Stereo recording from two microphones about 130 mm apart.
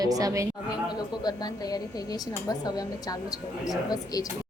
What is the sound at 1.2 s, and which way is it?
A woman's voice, 30° left (ahead or behind).